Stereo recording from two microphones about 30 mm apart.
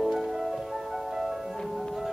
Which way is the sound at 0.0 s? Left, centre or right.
Centre.